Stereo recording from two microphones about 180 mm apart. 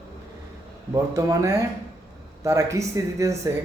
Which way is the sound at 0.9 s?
15° right (ahead or behind).